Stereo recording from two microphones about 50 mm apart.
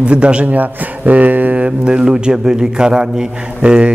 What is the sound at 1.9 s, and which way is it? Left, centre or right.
A man's voice, centre.